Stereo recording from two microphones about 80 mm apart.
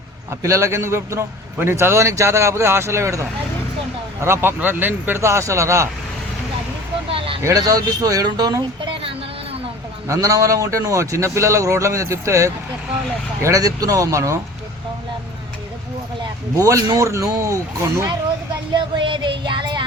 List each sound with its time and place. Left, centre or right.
0.4 s a man's voice: right
5.2 s a man's voice: right
7.4 s a man's voice: right
10.1 s a man's voice: right
16.6 s a man's voice: right
18.7 s music: right